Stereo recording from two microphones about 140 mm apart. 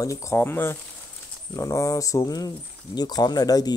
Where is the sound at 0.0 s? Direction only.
20° left (ahead or behind).